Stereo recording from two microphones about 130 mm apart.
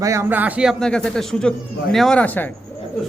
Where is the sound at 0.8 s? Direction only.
5° left (ahead or behind).